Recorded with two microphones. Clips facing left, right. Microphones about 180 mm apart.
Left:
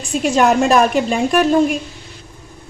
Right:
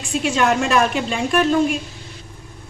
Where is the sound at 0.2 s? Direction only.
40° left (ahead or behind).